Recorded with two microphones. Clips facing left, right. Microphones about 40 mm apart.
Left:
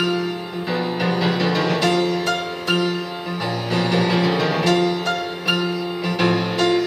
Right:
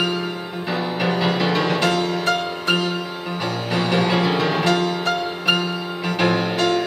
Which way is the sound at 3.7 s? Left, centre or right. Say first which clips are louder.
Even; centre.